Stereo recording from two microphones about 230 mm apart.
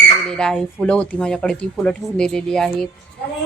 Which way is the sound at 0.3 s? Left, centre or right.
Centre.